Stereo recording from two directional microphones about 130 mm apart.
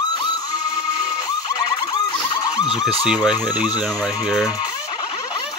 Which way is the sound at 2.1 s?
35° left (ahead or behind).